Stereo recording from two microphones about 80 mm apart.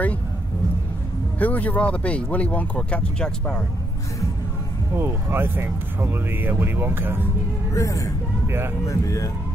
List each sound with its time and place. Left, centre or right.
1.4 s speech: centre
4.9 s speech: right
7.7 s speech: left
8.5 s speech: right
8.8 s speech: left